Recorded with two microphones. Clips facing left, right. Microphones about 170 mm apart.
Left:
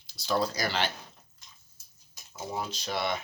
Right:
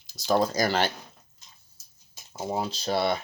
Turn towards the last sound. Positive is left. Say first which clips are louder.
# right 6 dB
turn(degrees=-35)  # may be behind; listen again after turning